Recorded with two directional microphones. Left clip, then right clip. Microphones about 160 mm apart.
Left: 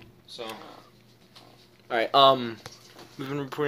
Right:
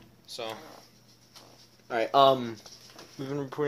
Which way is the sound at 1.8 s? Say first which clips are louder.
Left 2 dB; 25° right (ahead or behind).